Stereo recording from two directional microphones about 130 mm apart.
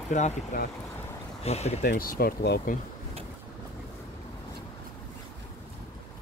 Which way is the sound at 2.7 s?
90° left.